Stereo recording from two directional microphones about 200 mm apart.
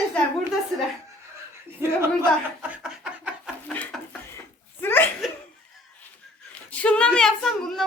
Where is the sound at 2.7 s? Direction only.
5° right (ahead or behind).